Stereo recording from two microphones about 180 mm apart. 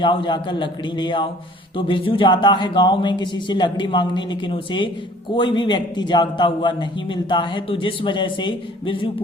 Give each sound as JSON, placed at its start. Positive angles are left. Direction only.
{"t": 0.0, "sound": "a man's voice", "side_deg": 25}